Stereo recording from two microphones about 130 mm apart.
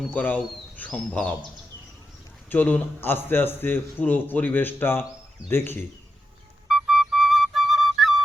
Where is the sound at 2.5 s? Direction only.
15° left (ahead or behind).